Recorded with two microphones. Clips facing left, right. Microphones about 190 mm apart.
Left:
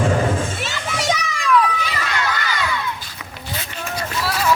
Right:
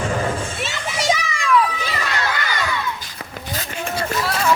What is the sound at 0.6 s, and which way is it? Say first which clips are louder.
Children playing: even; centre (ahead or behind).